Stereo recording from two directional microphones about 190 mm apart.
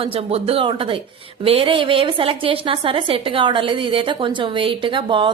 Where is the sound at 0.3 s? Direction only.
30° right (ahead or behind).